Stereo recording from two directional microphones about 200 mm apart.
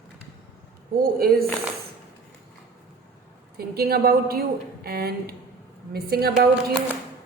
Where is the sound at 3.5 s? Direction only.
50° right (ahead or behind).